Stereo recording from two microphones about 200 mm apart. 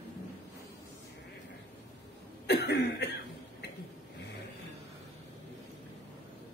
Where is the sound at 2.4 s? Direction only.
55° left (ahead or behind).